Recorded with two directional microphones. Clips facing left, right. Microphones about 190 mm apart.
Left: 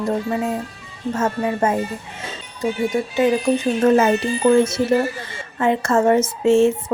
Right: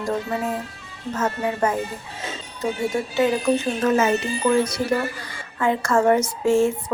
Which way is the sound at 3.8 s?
30° left (ahead or behind).